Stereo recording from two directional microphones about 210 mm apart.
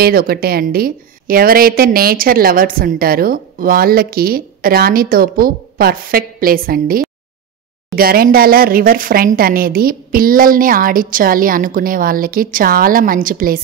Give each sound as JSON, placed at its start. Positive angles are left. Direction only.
{"t": 0.0, "sound": "a woman's voice", "side_deg": -45}